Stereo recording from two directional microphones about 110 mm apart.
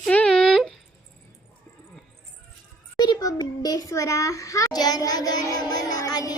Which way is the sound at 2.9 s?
40° left (ahead or behind).